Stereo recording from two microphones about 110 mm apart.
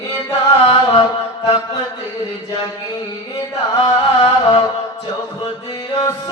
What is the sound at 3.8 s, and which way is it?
Music, 45° left (ahead or behind).